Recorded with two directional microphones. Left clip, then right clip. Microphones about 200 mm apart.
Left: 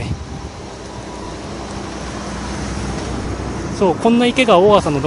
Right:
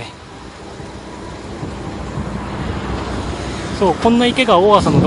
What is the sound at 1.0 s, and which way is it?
Vehicle, 45° left (ahead or behind).